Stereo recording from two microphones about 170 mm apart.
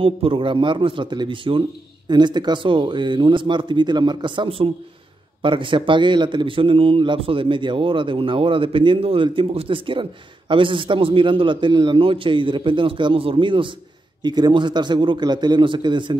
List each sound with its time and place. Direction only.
0.0 s a man's voice: 30° right (ahead or behind)